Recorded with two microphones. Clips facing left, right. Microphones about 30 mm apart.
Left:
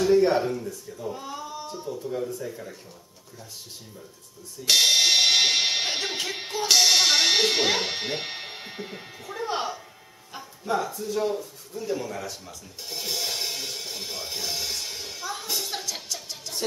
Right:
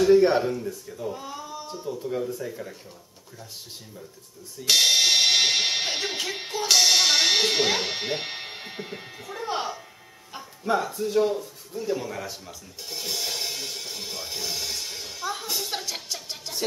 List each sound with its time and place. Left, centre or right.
0.0 s speech: centre
0.4 s speech: centre
1.1 s a sound: centre
2.3 s speech: centre
4.6 s speech: centre
10.6 s speech: centre
11.2 s music: centre
15.7 s music: centre